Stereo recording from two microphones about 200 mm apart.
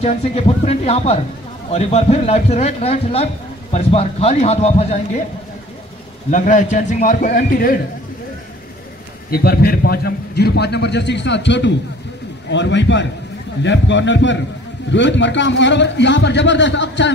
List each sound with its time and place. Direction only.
0.0 s speech: 30° left (ahead or behind)
6.3 s speech: 40° left (ahead or behind)
9.3 s a man's voice: 50° left (ahead or behind)